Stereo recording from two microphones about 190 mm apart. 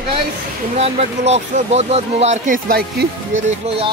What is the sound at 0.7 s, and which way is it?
Speech, 35° right (ahead or behind).